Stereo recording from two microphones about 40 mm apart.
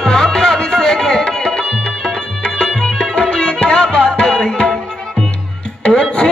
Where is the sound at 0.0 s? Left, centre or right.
Centre.